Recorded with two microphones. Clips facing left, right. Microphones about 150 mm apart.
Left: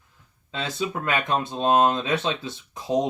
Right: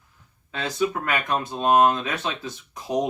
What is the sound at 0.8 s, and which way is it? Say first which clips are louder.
Speech: right 2 dB; 25° left (ahead or behind).